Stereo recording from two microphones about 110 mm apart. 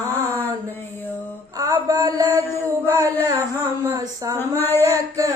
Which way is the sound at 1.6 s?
35° right (ahead or behind).